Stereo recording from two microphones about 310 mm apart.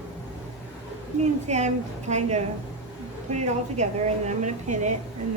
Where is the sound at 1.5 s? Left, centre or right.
Right.